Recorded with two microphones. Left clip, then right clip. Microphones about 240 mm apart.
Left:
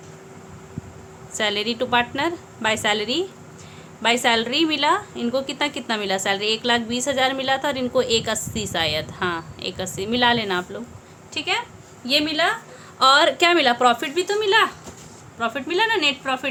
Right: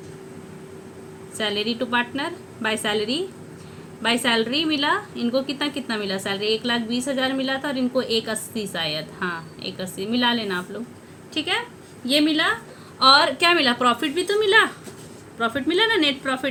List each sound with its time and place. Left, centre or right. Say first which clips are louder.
1.4 s a woman's voice: left 2 dB; centre